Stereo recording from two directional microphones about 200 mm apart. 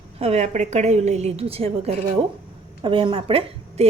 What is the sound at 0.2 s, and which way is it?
A woman's voice, 35° right (ahead or behind).